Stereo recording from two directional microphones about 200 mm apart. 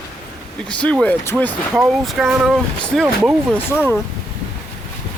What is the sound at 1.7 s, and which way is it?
Speech, 5° right (ahead or behind).